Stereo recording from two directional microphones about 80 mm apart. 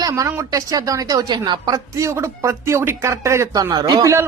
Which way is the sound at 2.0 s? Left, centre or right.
Right.